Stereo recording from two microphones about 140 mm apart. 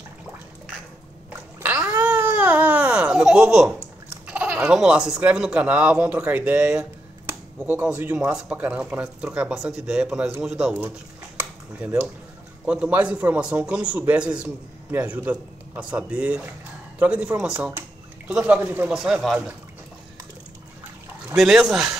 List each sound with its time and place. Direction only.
1.6 s crying: 10° right (ahead or behind)
4.3 s a man's voice: 10° right (ahead or behind)
11.3 s a sound: 10° right (ahead or behind)
12.6 s a man's voice: 10° right (ahead or behind)
21.4 s speech: 5° right (ahead or behind)